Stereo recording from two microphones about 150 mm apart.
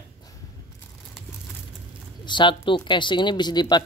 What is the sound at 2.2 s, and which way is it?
Speech, 30° left (ahead or behind).